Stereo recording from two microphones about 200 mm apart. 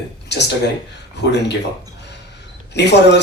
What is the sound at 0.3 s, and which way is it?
Speech, 60° left (ahead or behind).